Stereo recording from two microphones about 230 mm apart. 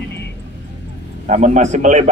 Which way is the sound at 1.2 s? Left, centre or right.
Right.